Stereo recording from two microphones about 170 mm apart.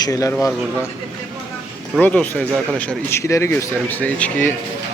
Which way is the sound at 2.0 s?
10° left (ahead or behind).